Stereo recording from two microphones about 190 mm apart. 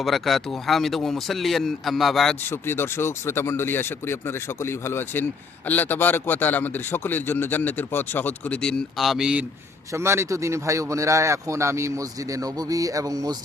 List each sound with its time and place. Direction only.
0.0 s speech: centre (ahead or behind)
2.5 s a man's voice: 10° left (ahead or behind); by 13.3 s 20° right (ahead or behind)